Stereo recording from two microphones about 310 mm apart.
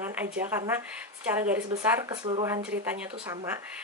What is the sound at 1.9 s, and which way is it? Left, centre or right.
Speech, centre.